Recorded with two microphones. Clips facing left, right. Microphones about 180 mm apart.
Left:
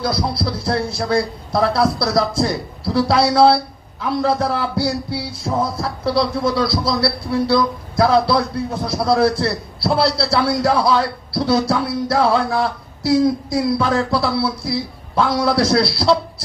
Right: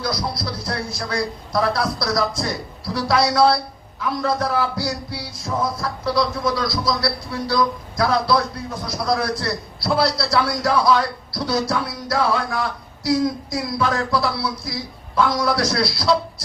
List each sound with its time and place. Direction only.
0.0 s a man's voice: 30° left (ahead or behind)